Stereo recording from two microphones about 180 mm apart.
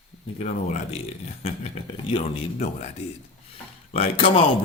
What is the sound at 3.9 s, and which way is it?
Speech, 30° left (ahead or behind).